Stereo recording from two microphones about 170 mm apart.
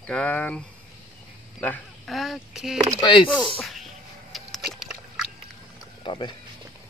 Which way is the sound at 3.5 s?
Centre (ahead or behind).